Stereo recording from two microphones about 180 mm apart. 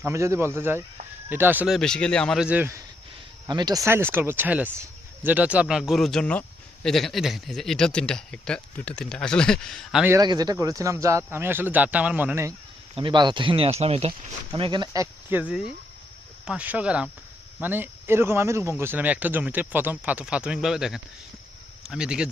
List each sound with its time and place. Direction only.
0.0 s speech: 15° right (ahead or behind)
3.4 s speech: 25° right (ahead or behind); by 10.1 s centre (ahead or behind)
10.1 s speech: 20° right (ahead or behind)
13.0 s speech: 25° right (ahead or behind)
15.3 s speech: 10° right (ahead or behind)